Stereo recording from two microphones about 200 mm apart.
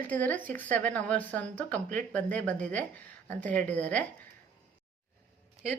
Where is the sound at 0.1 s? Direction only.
10° left (ahead or behind).